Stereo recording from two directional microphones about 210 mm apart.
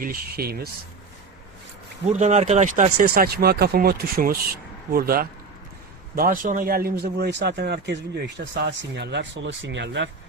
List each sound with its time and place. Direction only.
0.0 s speech: 45° right (ahead or behind)
2.0 s speech: 35° right (ahead or behind); by 10.1 s 60° right (ahead or behind)